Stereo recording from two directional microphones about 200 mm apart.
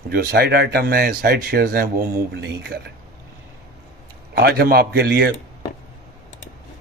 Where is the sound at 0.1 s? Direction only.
50° right (ahead or behind).